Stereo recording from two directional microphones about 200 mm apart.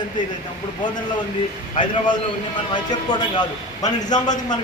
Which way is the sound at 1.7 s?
25° left (ahead or behind).